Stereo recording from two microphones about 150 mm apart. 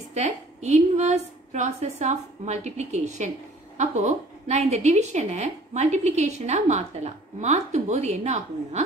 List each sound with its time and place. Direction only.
0.1 s a woman's voice: 50° right (ahead or behind)